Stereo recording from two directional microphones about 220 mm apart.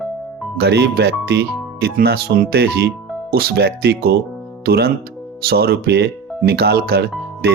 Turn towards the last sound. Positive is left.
turn(degrees=-45)  # may be behind; listen again after turning